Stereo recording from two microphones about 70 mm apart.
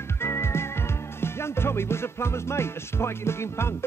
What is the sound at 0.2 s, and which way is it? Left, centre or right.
Music, left.